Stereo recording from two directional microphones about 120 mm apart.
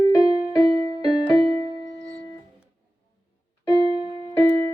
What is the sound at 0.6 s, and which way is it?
Music, 65° right (ahead or behind).